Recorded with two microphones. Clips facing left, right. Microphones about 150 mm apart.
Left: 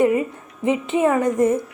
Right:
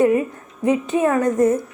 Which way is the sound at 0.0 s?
15° left (ahead or behind).